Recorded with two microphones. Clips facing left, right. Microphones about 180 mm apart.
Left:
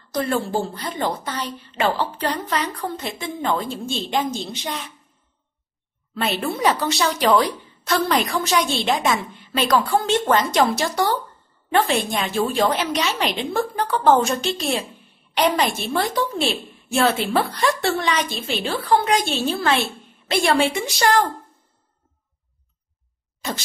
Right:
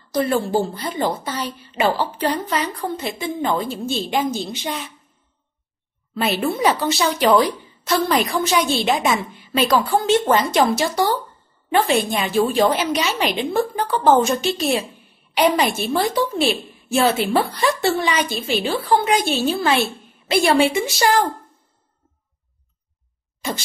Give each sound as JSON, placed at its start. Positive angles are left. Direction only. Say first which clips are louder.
{"t": 0.1, "sound": "a woman's voice", "louder": "right 3 dB", "side_deg": -5}
{"t": 6.1, "sound": "a woman's voice", "louder": "right 3 dB", "side_deg": 0}